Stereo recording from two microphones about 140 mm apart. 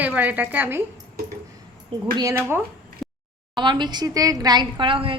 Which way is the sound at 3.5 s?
35° right (ahead or behind).